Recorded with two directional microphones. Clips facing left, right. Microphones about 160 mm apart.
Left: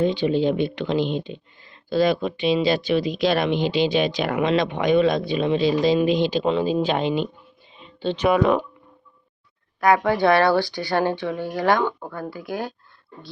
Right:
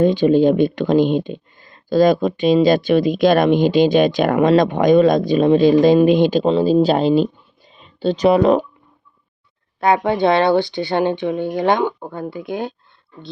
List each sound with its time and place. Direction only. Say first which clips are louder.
0.0 s speech: right 7 dB; 45° right (ahead or behind)
6.4 s speech: right 7 dB; 35° right (ahead or behind)
9.8 s speech: right 2 dB; 25° right (ahead or behind)